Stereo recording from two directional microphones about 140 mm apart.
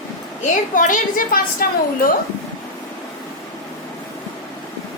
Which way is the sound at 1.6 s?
90° left.